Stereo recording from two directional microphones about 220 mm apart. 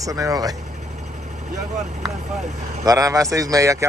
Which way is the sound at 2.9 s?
15° right (ahead or behind).